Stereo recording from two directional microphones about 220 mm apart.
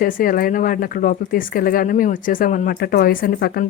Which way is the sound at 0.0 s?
40° left (ahead or behind).